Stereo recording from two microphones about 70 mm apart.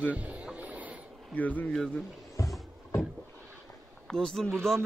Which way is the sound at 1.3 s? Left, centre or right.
Left.